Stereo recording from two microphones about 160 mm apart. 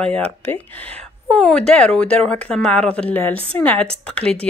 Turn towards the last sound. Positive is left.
turn(degrees=5)  # may be behind; listen again after turning